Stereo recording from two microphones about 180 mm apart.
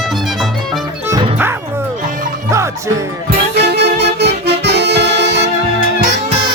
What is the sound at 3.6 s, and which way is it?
Music, 70° right (ahead or behind).